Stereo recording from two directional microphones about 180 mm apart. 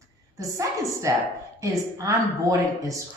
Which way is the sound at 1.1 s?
15° right (ahead or behind).